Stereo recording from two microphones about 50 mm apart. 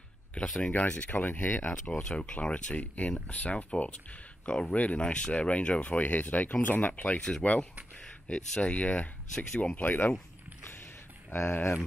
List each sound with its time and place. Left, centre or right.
0.3 s speech: left
5.9 s speech: left
7.2 s speech: centre; by 10.1 s left
10.6 s a sound: left